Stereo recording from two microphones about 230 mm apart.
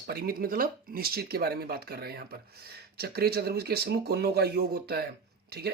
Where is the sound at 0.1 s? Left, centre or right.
Right.